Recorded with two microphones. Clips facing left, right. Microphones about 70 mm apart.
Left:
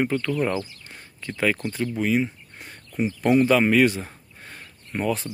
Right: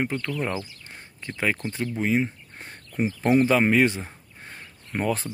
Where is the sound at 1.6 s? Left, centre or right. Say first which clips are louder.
Left 2 dB; centre.